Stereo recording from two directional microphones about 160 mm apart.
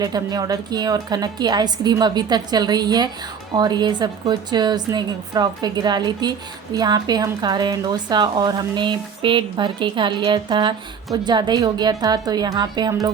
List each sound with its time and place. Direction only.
0.0 s speech: 25° right (ahead or behind)